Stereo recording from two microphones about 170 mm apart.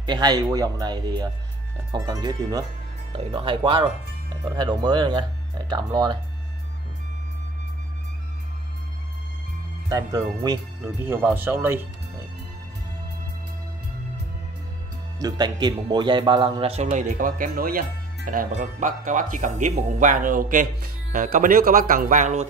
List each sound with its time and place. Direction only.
0.0 s speech: 25° right (ahead or behind)
3.2 s speech: 30° right (ahead or behind)
9.8 s speech: 25° right (ahead or behind)
10.8 s speech: 10° right (ahead or behind)
15.1 s speech: 25° right (ahead or behind); by 22.5 s 45° right (ahead or behind)